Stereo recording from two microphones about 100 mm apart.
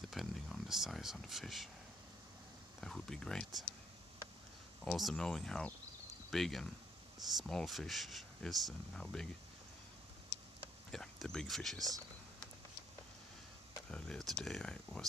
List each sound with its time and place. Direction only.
0.1 s speech: centre (ahead or behind)
2.8 s speech: 5° left (ahead or behind)
4.9 s speech: centre (ahead or behind)
10.9 s speech: 5° left (ahead or behind)
13.8 s speech: 10° left (ahead or behind)